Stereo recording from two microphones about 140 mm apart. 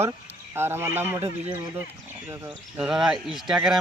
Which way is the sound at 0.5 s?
15° right (ahead or behind).